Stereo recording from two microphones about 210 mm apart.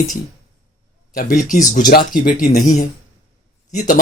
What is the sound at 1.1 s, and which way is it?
Speech, 40° left (ahead or behind).